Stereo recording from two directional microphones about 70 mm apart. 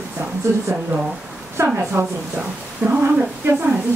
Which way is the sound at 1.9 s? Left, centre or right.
Right.